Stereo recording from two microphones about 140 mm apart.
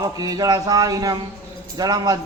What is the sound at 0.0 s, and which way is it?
A man's voice, 25° right (ahead or behind).